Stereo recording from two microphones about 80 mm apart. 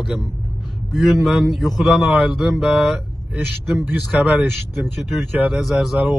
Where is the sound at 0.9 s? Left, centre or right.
Centre.